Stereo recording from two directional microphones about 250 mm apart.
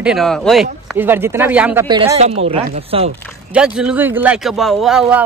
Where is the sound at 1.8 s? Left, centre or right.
Right.